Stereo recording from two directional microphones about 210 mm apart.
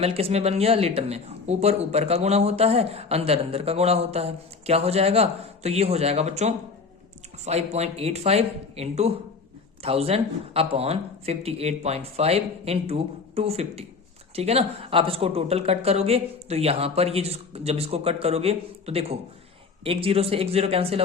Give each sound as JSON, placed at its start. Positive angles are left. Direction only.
{"t": 0.0, "sound": "speech", "side_deg": -30}